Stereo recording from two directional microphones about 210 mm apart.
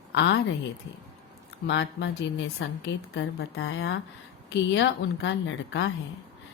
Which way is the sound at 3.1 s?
65° left (ahead or behind).